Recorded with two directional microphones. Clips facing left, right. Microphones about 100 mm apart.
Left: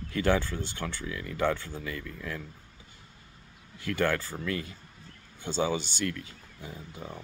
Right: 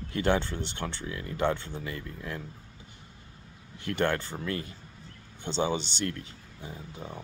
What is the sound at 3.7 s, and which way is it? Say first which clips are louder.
Speech: even; 25° right (ahead or behind).